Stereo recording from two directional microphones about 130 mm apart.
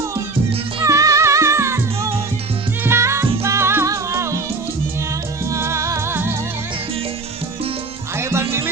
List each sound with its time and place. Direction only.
0.9 s music: 25° right (ahead or behind)
5.5 s music: 20° right (ahead or behind)
8.1 s music: 20° right (ahead or behind)